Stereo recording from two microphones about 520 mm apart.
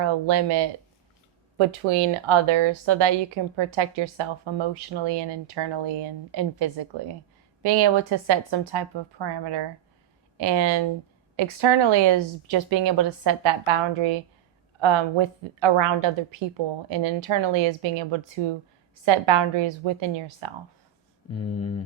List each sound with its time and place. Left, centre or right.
0.0 s speech: right
1.5 s speech: right
13.7 s speech: right
21.3 s speech: left